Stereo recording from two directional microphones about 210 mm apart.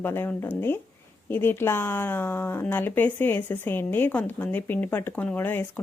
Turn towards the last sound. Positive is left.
turn(degrees=10)  # may be behind; listen again after turning